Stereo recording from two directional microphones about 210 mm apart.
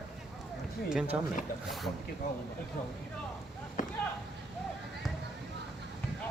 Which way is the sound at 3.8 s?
40° left (ahead or behind).